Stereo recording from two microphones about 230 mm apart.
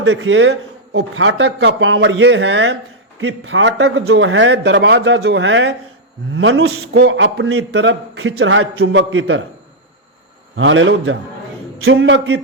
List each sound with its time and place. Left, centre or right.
0.0 s a man's voice: right
10.6 s a man's voice: right